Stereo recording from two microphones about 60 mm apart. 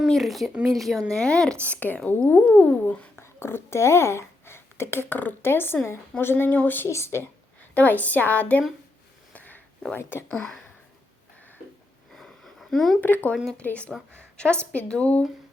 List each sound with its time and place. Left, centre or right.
0.1 s speech: centre
1.6 s a woman's voice: left
3.2 s a woman's voice: left
6.8 s speech: left
7.7 s a woman's voice: left
9.3 s a sound: left
10.0 s speech: left
10.2 s speech: centre
12.1 s a sound: centre
13.0 s a woman's voice: left
13.9 s speech: centre
14.3 s a woman's voice: centre